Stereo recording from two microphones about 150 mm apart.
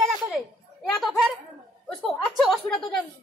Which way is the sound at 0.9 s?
Centre (ahead or behind).